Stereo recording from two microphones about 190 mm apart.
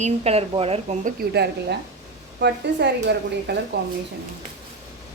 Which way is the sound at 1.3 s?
60° right (ahead or behind).